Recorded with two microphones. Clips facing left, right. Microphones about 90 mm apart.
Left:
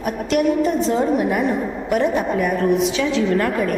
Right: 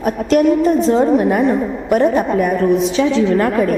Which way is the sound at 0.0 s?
40° right (ahead or behind).